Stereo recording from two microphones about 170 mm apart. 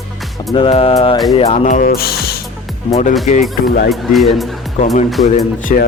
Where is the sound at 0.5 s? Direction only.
30° left (ahead or behind).